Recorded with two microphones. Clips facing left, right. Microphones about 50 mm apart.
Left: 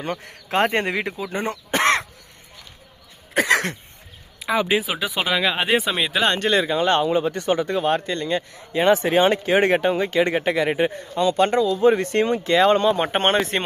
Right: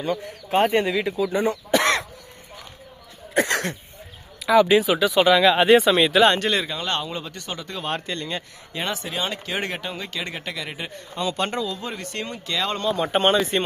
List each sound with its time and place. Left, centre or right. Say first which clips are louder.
0.0 s speech: right 2 dB; left
0.8 s speech: right 2 dB; left
4.4 s speech: right 5 dB; centre
6.7 s speech: left 8 dB; centre
7.8 s speech: left 6 dB; centre
8.9 s speech: left 13 dB; left
11.3 s speech: left 9 dB; centre
11.7 s speech: left 14 dB; left
13.0 s speech: even; left